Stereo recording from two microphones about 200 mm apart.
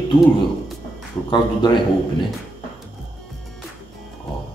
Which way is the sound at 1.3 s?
20° left (ahead or behind).